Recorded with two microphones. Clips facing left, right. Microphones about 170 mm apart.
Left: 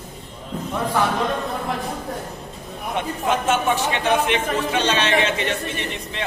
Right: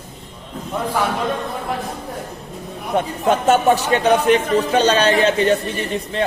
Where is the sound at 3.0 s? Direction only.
40° right (ahead or behind).